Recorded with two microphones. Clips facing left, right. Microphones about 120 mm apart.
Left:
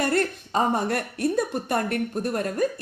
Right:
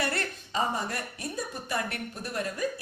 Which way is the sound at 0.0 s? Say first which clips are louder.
Left 8 dB; 45° left (ahead or behind).